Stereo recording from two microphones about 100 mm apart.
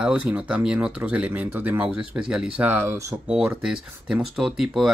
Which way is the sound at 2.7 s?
25° right (ahead or behind).